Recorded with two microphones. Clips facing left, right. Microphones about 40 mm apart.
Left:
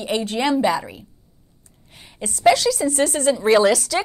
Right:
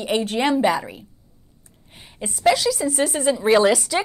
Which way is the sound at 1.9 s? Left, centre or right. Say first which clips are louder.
Left 1 dB; centre.